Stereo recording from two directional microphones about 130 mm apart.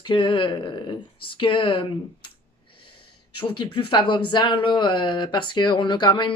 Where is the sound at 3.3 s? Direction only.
45° left (ahead or behind).